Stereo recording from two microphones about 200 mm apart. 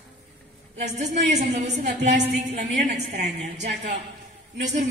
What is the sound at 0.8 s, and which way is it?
A woman's voice, 35° right (ahead or behind).